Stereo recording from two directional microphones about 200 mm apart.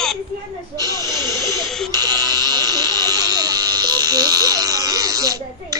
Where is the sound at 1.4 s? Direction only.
Centre (ahead or behind).